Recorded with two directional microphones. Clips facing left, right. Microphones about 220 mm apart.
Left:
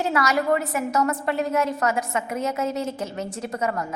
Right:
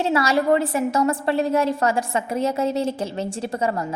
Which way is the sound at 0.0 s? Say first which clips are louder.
Right 3 dB; 30° right (ahead or behind).